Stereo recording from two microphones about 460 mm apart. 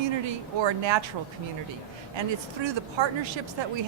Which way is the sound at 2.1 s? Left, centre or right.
Right.